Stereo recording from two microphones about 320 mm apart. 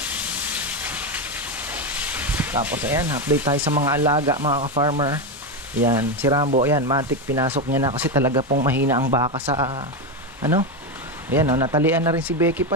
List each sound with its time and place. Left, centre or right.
0.0 s train: centre
4.4 s speech: right
11.2 s speech: centre